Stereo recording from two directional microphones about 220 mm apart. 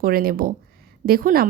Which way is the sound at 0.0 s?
40° right (ahead or behind).